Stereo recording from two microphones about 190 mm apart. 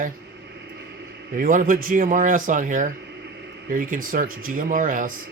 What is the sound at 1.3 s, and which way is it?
Speech, 45° right (ahead or behind).